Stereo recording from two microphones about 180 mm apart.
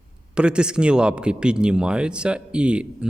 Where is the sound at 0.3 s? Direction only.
5° right (ahead or behind).